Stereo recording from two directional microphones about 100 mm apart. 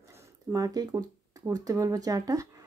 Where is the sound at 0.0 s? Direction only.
30° right (ahead or behind).